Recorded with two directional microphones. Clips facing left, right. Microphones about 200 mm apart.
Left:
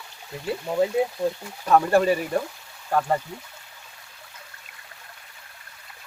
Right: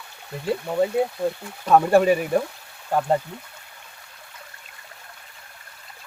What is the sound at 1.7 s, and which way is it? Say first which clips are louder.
Speech: right 2 dB; 15° right (ahead or behind).